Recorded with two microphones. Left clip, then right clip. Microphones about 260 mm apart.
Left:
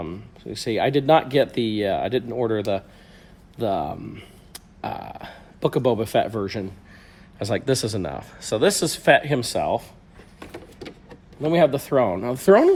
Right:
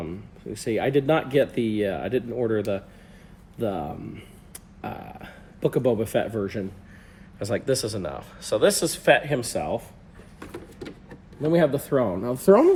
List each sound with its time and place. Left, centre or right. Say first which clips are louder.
0.6 s speech: left 2 dB; left
4.1 s burping: left 2 dB; left
5.6 s speech: left 2 dB; left
10.4 s a sound: left 1 dB; centre
11.9 s speech: left 5 dB; left
12.3 s speech: left 1 dB; centre